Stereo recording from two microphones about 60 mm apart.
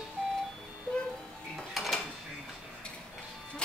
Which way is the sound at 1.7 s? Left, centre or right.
Centre.